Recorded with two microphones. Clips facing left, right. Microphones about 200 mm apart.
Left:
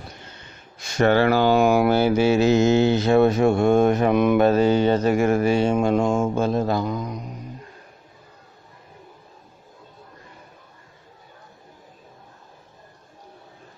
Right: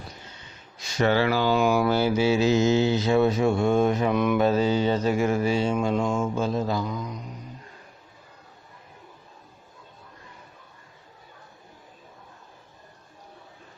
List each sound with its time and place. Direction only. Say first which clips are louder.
0.4 s speech: left 2 dB; 55° left (ahead or behind)
4.4 s mantra: left 5 dB; 60° left (ahead or behind)